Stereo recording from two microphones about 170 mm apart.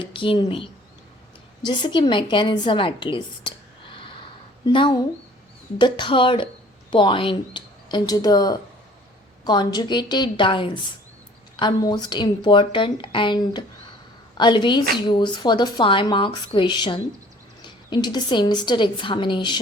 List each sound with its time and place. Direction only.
0.0 s a woman's voice: 30° left (ahead or behind)